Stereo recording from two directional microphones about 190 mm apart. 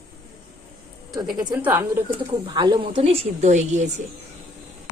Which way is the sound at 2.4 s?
25° right (ahead or behind).